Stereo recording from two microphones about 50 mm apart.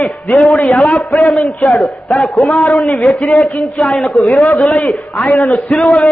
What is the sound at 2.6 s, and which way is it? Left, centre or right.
Speech, left.